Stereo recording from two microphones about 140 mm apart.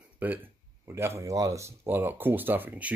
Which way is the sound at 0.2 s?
10° right (ahead or behind).